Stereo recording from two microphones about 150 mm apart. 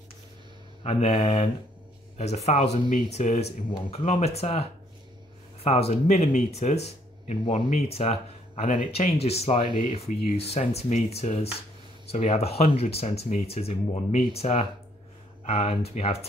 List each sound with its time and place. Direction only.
0.8 s speech: 45° left (ahead or behind)